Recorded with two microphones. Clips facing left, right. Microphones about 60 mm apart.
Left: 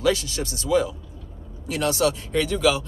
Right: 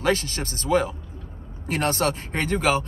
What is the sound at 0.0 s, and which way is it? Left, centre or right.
Speech, right.